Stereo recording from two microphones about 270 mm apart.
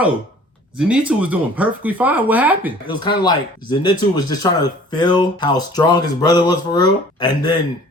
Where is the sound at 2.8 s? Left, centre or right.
Centre.